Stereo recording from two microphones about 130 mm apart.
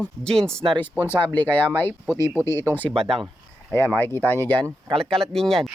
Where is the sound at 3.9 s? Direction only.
15° left (ahead or behind).